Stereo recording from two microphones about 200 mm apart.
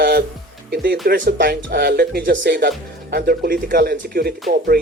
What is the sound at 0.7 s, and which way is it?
Speech, 50° right (ahead or behind).